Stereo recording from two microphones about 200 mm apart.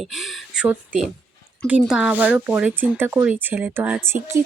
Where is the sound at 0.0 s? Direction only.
Centre (ahead or behind).